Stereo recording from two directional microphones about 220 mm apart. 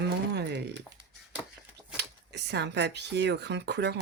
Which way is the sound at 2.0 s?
50° right (ahead or behind).